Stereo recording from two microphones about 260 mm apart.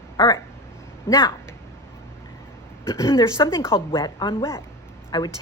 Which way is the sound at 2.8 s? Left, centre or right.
Centre.